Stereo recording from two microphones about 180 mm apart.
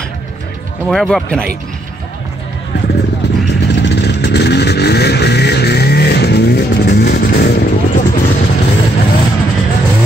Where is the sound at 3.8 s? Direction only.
70° left (ahead or behind).